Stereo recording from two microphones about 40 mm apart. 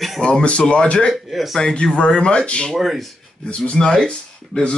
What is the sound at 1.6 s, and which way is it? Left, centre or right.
Speech, centre.